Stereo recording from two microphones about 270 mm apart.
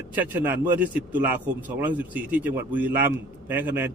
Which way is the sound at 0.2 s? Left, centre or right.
Centre.